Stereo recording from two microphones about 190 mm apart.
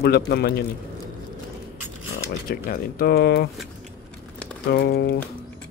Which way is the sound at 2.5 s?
50° left (ahead or behind).